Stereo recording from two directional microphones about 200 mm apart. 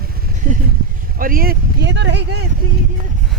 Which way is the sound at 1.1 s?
45° right (ahead or behind).